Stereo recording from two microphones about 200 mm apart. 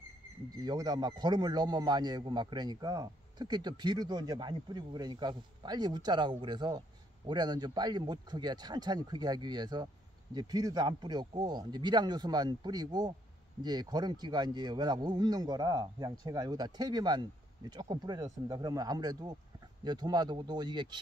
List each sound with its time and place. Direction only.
0.6 s a man's voice: 20° right (ahead or behind)